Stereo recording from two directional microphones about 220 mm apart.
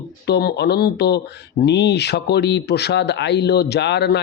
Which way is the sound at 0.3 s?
50° left (ahead or behind).